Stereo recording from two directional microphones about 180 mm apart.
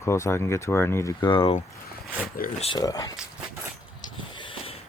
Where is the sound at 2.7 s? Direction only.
20° left (ahead or behind).